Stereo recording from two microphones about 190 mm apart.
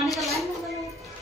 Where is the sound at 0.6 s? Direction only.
Centre (ahead or behind).